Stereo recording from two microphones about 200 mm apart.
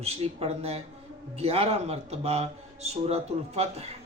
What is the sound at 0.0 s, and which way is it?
Speech, 30° right (ahead or behind).